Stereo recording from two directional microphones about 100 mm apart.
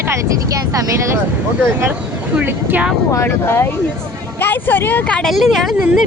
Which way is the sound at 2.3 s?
15° right (ahead or behind).